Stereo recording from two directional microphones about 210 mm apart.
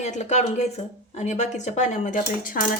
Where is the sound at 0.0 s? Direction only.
35° left (ahead or behind).